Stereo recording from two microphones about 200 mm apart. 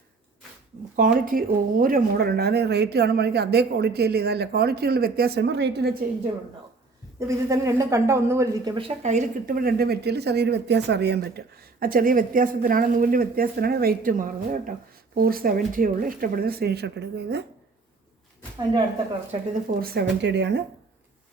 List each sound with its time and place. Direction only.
0.9 s speech: 45° right (ahead or behind)
7.2 s speech: 15° right (ahead or behind)
8.7 s speech: 30° right (ahead or behind); by 17.4 s 55° right (ahead or behind)
19.8 s speech: 50° right (ahead or behind)